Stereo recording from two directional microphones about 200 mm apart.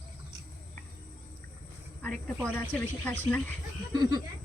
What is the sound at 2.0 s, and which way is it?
Speech, 5° left (ahead or behind).